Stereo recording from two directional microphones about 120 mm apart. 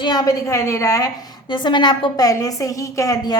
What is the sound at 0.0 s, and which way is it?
A woman's voice, 35° left (ahead or behind).